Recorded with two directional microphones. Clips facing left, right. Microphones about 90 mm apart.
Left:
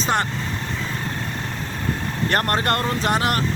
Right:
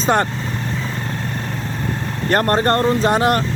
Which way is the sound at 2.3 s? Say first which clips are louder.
Right 6 dB; 30° right (ahead or behind).